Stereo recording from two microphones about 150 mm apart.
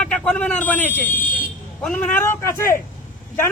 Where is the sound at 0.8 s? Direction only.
65° left (ahead or behind).